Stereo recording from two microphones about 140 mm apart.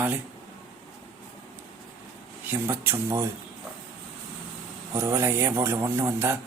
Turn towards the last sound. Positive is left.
turn(degrees=-20)  # may be behind; listen again after turning